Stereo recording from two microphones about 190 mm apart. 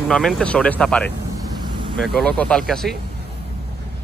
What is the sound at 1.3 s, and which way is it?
Vehicle, 25° right (ahead or behind).